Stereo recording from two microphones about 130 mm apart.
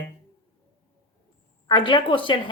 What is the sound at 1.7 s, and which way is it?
Speech, 40° left (ahead or behind).